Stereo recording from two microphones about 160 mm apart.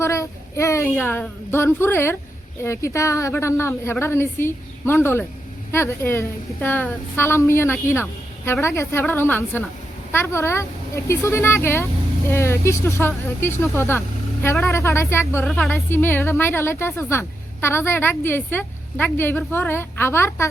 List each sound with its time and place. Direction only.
0.0 s a woman's voice: 20° left (ahead or behind)
15.4 s a woman's voice: centre (ahead or behind)
15.7 s a woman's voice: 15° left (ahead or behind)